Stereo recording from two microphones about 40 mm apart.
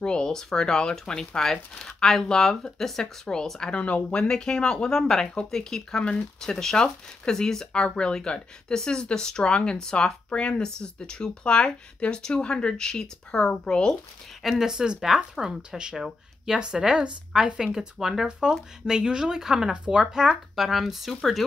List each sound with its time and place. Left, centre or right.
0.0 s speech: centre
3.7 s speech: left; by 6.0 s centre
6.0 s speech: left
6.5 s speech: centre
14.4 s speech: centre
14.7 s speech: centre